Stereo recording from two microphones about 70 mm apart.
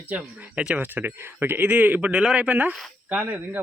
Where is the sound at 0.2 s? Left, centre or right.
Centre.